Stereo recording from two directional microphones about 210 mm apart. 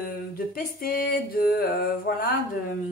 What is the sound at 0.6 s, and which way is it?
A woman's voice, 45° left (ahead or behind).